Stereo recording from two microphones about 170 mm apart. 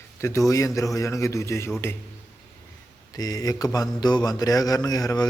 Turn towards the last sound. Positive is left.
turn(degrees=20)  # may be behind; listen again after turning